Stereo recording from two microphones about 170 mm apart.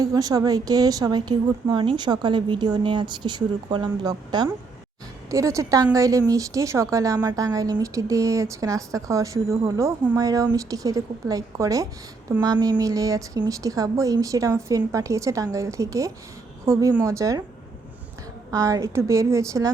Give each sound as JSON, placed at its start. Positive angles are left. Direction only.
{"t": 0.0, "sound": "a woman's voice", "side_deg": -20}
{"t": 18.5, "sound": "a woman's voice", "side_deg": -20}